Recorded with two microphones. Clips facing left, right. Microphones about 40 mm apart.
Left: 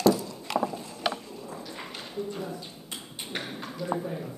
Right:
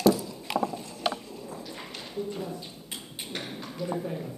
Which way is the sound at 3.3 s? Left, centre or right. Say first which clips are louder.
Left 2 dB; centre.